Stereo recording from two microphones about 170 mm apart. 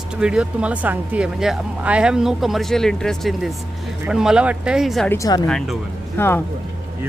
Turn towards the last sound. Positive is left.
turn(degrees=15)  # may be behind; listen again after turning